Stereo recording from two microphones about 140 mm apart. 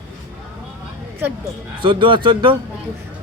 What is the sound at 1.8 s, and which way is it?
Speech, 35° right (ahead or behind).